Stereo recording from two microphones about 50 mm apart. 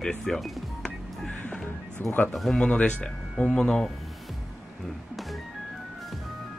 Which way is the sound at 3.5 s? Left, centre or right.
Centre.